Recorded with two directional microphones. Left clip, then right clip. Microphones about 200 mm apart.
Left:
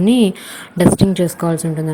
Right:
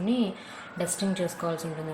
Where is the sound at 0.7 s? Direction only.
40° left (ahead or behind).